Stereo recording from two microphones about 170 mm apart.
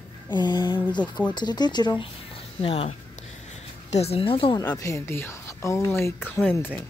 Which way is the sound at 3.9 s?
35° left (ahead or behind).